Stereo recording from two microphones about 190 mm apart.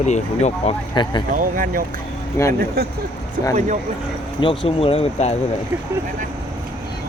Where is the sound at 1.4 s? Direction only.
45° right (ahead or behind).